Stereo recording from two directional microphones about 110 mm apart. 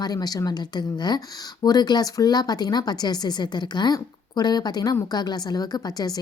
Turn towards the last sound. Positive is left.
turn(degrees=35)  # may be behind; listen again after turning